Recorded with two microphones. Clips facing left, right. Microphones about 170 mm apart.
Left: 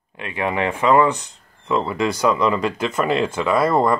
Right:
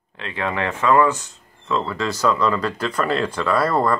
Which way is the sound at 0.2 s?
15° left (ahead or behind).